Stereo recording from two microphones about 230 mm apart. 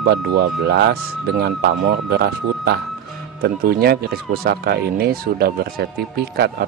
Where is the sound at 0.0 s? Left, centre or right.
Right.